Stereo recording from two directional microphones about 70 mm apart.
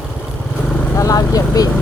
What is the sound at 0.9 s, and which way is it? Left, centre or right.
Vehicle, left.